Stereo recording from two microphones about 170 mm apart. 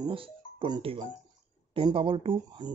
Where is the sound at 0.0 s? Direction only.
30° right (ahead or behind).